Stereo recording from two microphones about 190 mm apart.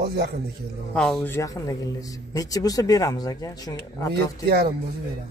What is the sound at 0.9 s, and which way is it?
A man's voice, 5° left (ahead or behind).